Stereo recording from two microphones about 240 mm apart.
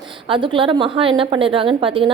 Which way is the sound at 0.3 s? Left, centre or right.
Right.